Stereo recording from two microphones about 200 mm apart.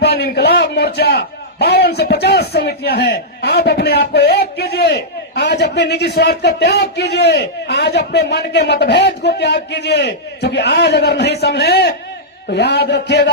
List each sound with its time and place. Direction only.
0.0 s a man's voice: 55° left (ahead or behind)